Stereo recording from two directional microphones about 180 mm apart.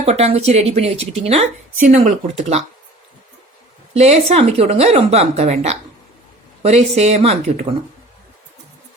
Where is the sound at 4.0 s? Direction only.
35° right (ahead or behind).